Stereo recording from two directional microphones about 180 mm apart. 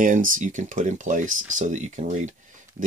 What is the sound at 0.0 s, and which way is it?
Speech, 45° right (ahead or behind).